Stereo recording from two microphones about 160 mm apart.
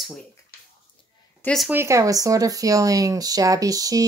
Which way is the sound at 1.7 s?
15° right (ahead or behind).